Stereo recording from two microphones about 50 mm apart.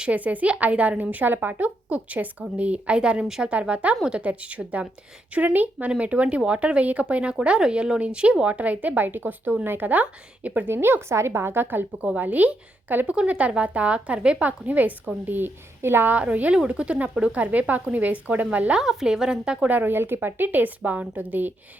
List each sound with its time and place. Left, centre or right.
0.1 s speech: right
1.1 s a woman's voice: right
10.7 s a woman's voice: right
12.0 s a woman's voice: right
16.1 s speech: right
18.8 s a woman's voice: centre
19.6 s a woman's voice: right